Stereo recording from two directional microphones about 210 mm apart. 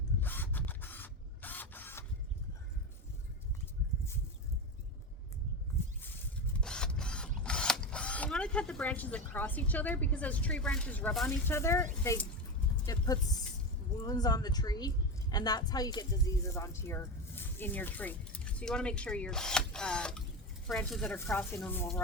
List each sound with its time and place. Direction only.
0.2 s printer: 10° left (ahead or behind)
6.6 s speech: 5° left (ahead or behind)
12.8 s a sound: 15° left (ahead or behind)
14.0 s a woman's voice: 20° left (ahead or behind)